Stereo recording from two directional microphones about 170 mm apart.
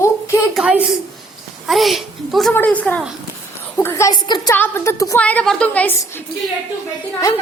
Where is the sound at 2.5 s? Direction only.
10° left (ahead or behind).